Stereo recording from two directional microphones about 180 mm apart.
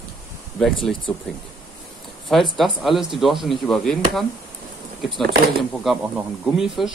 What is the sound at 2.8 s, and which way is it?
Speech, centre (ahead or behind).